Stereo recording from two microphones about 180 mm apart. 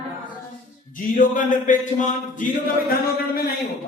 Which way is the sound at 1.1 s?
45° left (ahead or behind).